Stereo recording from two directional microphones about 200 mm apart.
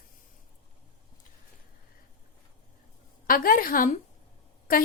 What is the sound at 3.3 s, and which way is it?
Speech, 45° left (ahead or behind).